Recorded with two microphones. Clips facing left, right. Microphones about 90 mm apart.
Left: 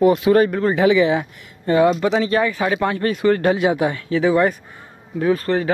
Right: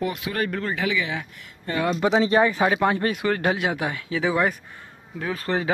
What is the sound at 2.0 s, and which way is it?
Speech, 15° right (ahead or behind).